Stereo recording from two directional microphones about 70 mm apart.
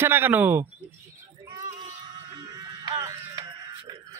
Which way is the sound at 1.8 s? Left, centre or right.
Right.